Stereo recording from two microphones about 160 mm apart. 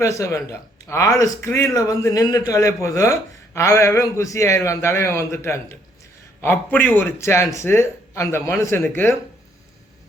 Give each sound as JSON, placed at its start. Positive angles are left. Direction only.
{"t": 0.0, "sound": "a man's voice", "side_deg": 20}